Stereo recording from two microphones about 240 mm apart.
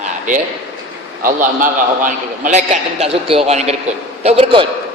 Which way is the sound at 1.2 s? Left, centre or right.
Right.